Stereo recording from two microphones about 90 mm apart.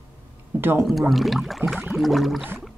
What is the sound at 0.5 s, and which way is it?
Speech, 30° right (ahead or behind).